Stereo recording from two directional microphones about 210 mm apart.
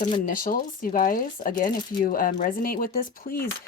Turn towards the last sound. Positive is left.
turn(degrees=45)  # may be behind; listen again after turning